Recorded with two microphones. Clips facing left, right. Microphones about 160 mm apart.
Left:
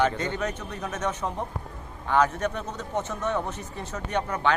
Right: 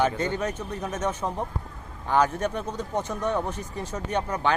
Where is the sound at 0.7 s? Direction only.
30° right (ahead or behind).